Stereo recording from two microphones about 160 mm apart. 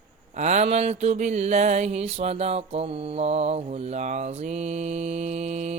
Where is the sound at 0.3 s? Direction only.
45° right (ahead or behind).